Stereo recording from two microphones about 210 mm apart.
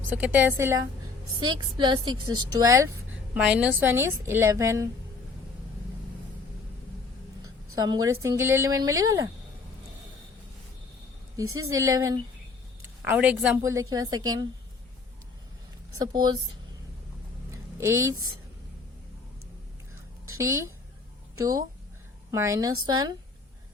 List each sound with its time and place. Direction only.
0.1 s a woman's voice: 5° right (ahead or behind)
7.8 s a woman's voice: 20° right (ahead or behind)
11.8 s a woman's voice: 15° right (ahead or behind)
13.6 s a woman's voice: 15° right (ahead or behind)
16.0 s a woman's voice: 20° right (ahead or behind)
17.5 s a woman's voice: 15° right (ahead or behind)
20.2 s a woman's voice: 15° right (ahead or behind)
22.3 s a woman's voice: 15° right (ahead or behind)